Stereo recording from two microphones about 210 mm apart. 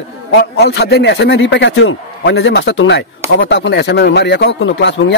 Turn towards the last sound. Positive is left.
turn(degrees=60)  # may be behind; listen again after turning